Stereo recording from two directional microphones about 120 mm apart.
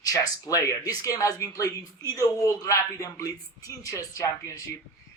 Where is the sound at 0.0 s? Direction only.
30° left (ahead or behind).